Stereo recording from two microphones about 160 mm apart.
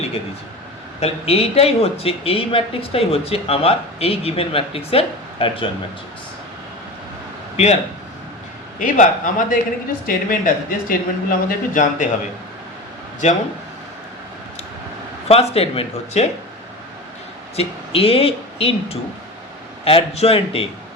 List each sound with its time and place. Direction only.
0.9 s speech: 40° left (ahead or behind)
7.5 s speech: 45° left (ahead or behind)
8.8 s speech: 55° left (ahead or behind)
13.2 s speech: 50° left (ahead or behind)
15.3 s speech: 40° left (ahead or behind)
17.6 s speech: 35° left (ahead or behind)